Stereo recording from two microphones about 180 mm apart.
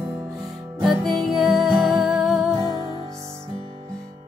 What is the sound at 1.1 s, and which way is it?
Music, centre (ahead or behind).